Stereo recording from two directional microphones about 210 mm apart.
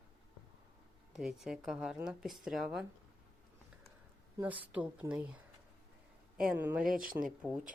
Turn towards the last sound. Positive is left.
turn(degrees=-5)  # may be behind; listen again after turning